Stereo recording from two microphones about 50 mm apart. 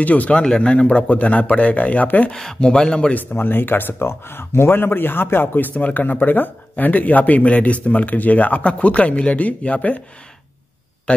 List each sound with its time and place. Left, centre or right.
0.0 s speech: left
0.4 s speech: centre; by 2.3 s left
2.3 s speech: centre
3.2 s speech: left
11.1 s speech: left